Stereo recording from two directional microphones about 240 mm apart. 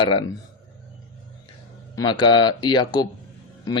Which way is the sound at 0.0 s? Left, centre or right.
Left.